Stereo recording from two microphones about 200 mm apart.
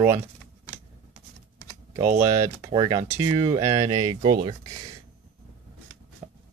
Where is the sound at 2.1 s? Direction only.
15° right (ahead or behind).